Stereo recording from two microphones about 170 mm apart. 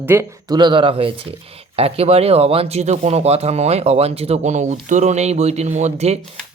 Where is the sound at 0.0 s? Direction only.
15° right (ahead or behind).